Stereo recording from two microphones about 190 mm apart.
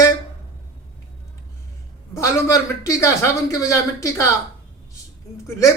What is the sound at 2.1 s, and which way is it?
A man's voice, 15° left (ahead or behind).